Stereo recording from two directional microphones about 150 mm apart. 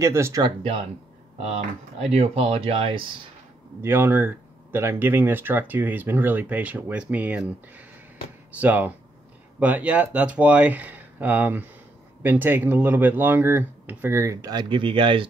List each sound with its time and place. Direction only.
0.0 s speech: 20° right (ahead or behind)
1.4 s speech: 45° right (ahead or behind)
3.8 s speech: 15° right (ahead or behind)
8.5 s speech: 10° right (ahead or behind); by 15.2 s 35° right (ahead or behind)